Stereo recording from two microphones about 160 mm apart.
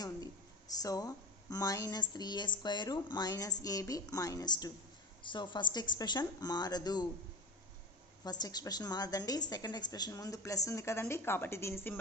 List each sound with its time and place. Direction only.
0.7 s a woman's voice: 25° left (ahead or behind)
8.2 s a woman's voice: 25° left (ahead or behind)